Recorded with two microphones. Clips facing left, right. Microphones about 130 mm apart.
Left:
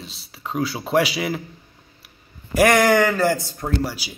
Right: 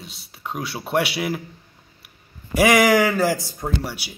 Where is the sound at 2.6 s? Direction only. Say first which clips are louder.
Even; 5° right (ahead or behind).